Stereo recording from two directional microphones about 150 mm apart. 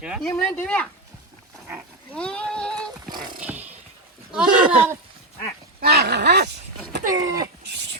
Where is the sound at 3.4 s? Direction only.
10° right (ahead or behind).